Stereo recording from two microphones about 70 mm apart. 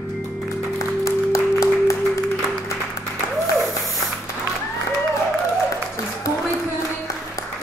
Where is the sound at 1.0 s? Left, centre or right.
Left.